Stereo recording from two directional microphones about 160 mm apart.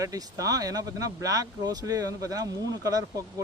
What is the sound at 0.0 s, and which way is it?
Speech, 20° right (ahead or behind).